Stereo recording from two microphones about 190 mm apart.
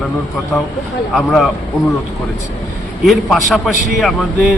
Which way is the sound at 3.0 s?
Centre (ahead or behind).